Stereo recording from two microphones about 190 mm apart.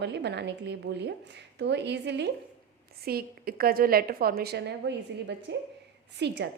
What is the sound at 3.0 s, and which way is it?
A woman's voice, 55° right (ahead or behind).